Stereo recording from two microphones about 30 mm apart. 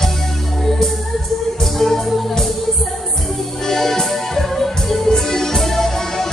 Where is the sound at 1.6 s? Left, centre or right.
Centre.